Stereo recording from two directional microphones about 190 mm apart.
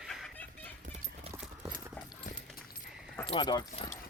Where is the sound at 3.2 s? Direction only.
25° left (ahead or behind).